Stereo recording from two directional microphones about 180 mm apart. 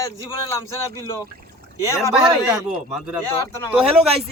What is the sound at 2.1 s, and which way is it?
Speech, 5° right (ahead or behind).